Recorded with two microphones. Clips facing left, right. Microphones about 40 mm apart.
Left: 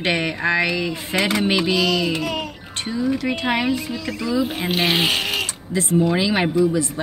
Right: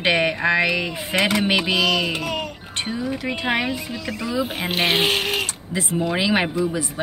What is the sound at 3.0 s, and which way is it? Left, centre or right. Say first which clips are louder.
Speech: left 4 dB; centre.